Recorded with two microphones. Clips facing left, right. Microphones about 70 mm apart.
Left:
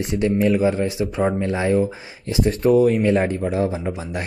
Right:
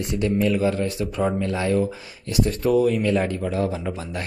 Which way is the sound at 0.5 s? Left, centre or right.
Centre.